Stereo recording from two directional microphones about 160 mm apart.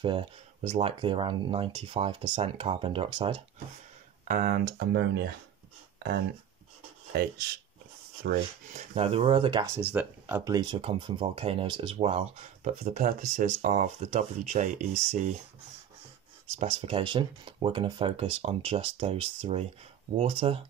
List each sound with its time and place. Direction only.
0.0 s speech: 35° right (ahead or behind)
4.3 s speech: 60° right (ahead or behind); by 5.3 s 90° right
7.1 s speech: 75° right (ahead or behind)
8.7 s speech: 40° right (ahead or behind)
9.7 s speech: 10° right (ahead or behind)
10.5 s speech: 25° right (ahead or behind); by 15.3 s 50° right (ahead or behind)
16.5 s speech: 40° right (ahead or behind)